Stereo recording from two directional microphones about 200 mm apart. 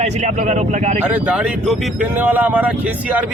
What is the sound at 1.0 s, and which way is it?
Speech, 5° right (ahead or behind).